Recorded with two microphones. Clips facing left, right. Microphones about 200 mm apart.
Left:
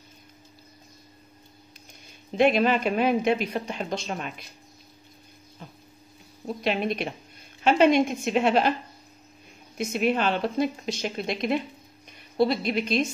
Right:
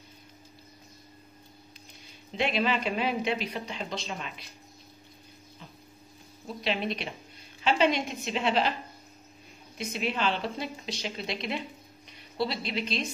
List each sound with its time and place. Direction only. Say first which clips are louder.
2.3 s speech: left 7 dB; 50° left (ahead or behind)
6.4 s speech: left 5 dB; 50° left (ahead or behind)
9.8 s speech: left 7 dB; 50° left (ahead or behind)